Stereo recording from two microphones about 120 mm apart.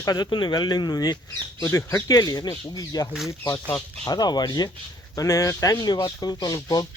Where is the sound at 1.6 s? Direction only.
20° left (ahead or behind).